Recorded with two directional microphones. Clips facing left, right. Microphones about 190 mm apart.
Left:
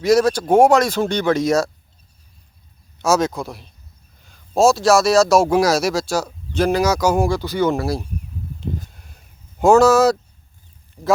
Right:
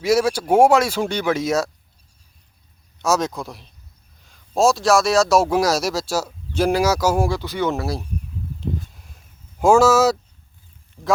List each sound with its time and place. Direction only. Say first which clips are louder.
0.0 s speech: left 3 dB; 5° right (ahead or behind)
3.0 s a man's voice: left 3 dB; centre (ahead or behind)
8.6 s a sound: right 1 dB; centre (ahead or behind)
11.0 s speech: left 3 dB; 15° left (ahead or behind)